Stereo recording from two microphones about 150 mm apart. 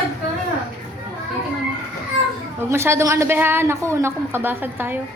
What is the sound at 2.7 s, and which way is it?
A woman's voice, 15° right (ahead or behind).